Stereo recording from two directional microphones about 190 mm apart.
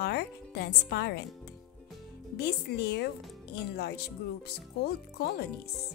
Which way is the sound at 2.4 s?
60° left (ahead or behind).